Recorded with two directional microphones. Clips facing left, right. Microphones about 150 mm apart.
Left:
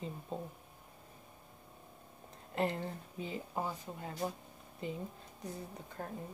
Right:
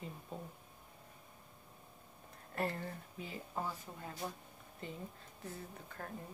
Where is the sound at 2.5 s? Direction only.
20° left (ahead or behind).